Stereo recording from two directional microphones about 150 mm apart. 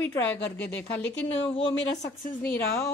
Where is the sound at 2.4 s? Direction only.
15° left (ahead or behind).